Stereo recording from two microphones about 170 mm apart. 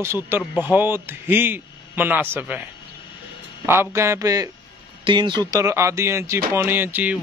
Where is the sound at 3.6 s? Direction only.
15° right (ahead or behind).